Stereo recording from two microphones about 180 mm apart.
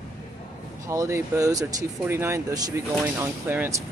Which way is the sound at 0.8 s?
15° right (ahead or behind).